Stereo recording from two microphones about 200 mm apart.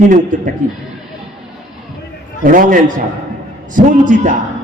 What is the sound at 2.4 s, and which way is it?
A man's voice, 40° right (ahead or behind).